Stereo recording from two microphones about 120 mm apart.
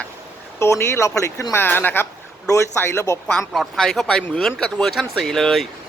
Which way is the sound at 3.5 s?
Centre (ahead or behind).